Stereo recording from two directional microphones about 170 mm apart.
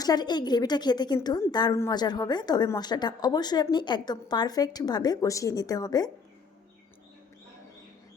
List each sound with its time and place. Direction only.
0.0 s a woman's voice: 25° left (ahead or behind)